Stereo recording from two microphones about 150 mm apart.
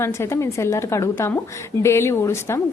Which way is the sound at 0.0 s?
20° left (ahead or behind).